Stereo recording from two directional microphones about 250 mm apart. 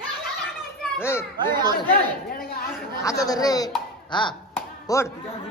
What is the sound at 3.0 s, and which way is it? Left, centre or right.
Speech, centre.